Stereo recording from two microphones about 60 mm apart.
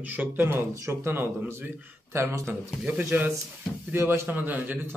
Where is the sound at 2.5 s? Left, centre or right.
Right.